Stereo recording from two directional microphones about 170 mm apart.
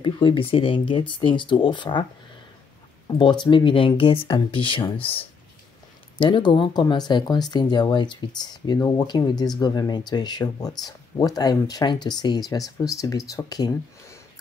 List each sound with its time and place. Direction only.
0.0 s speech: 30° left (ahead or behind)
3.1 s speech: 25° left (ahead or behind)
6.1 s speech: 30° left (ahead or behind)